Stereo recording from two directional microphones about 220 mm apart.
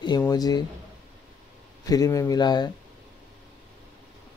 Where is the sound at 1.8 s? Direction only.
15° left (ahead or behind).